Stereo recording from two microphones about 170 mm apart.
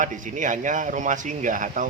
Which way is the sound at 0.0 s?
50° right (ahead or behind).